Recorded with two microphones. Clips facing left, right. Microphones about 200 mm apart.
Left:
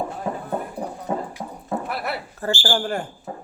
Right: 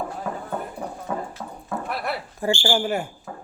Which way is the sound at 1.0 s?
20° left (ahead or behind).